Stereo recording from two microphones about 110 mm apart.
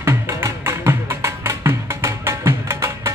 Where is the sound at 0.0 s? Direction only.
25° right (ahead or behind).